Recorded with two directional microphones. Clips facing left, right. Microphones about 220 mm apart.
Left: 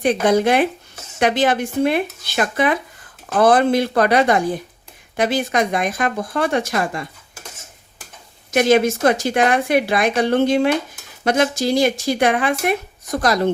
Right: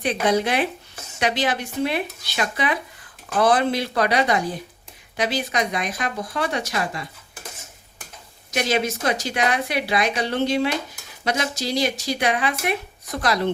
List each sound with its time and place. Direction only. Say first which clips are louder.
0.0 s speech: left 5 dB; 50° left (ahead or behind)
8.4 s speech: left 8 dB; 50° left (ahead or behind)